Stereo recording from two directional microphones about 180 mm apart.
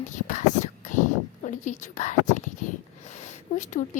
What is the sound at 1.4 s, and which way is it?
A woman's voice, 45° left (ahead or behind).